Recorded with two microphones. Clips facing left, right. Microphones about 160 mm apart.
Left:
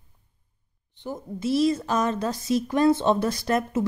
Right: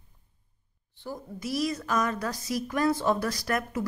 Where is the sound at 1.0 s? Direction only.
25° left (ahead or behind).